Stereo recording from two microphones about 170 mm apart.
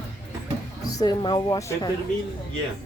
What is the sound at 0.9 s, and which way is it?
A woman's voice, 25° left (ahead or behind).